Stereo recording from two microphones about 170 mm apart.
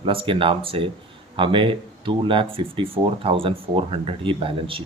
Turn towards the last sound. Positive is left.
turn(degrees=-30)  # may be behind; listen again after turning